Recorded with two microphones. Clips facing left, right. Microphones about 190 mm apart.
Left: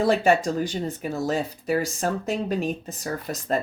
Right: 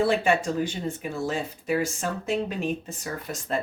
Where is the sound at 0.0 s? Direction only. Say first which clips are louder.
Left 3 dB; 40° left (ahead or behind).